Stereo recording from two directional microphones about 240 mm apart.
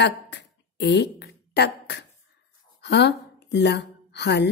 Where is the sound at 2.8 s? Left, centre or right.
Left.